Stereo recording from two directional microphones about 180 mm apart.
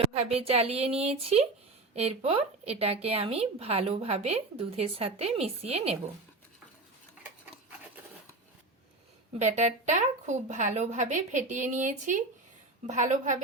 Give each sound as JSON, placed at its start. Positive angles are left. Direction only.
{"t": 0.1, "sound": "a woman's voice", "side_deg": -35}
{"t": 9.4, "sound": "a woman's voice", "side_deg": -40}